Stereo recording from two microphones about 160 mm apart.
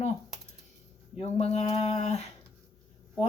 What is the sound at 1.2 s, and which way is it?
Speech, 40° left (ahead or behind).